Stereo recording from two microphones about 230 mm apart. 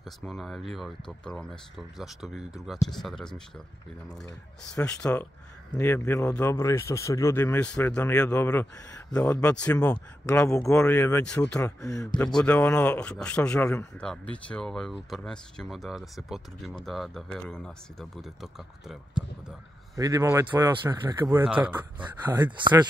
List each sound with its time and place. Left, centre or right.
0.0 s speech: centre
4.7 s speech: centre
20.0 s speech: centre
21.5 s speech: centre
22.2 s speech: centre